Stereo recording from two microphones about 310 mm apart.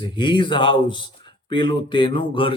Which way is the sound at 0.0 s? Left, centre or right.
Centre.